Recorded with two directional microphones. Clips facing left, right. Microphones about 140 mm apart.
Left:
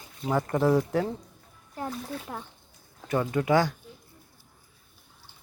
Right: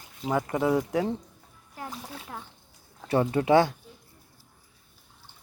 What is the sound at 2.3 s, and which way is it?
Speech, 10° left (ahead or behind).